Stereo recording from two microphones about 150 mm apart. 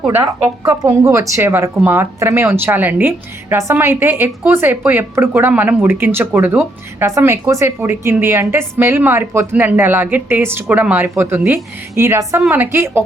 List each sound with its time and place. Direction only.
0.2 s speech: 20° right (ahead or behind)